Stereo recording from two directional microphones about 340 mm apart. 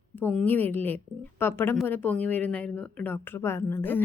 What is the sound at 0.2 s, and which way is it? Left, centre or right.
A woman's voice, centre.